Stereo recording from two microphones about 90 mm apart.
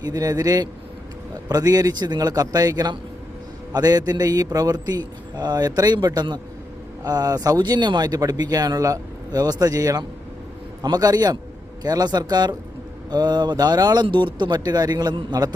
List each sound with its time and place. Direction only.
0.0 s speech: 45° right (ahead or behind)